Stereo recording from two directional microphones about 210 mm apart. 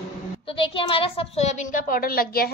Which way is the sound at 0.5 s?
25° left (ahead or behind).